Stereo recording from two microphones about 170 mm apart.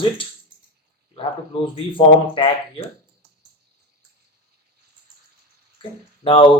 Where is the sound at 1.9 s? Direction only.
30° left (ahead or behind).